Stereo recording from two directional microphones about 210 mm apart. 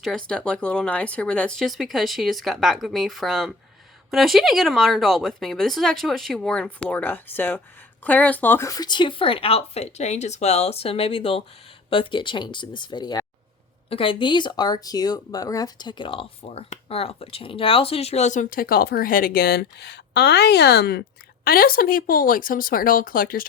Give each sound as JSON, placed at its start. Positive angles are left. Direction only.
{"t": 0.3, "sound": "a woman's voice", "side_deg": 5}